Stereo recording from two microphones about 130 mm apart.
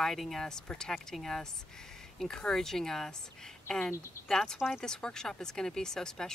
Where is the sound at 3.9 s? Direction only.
20° left (ahead or behind).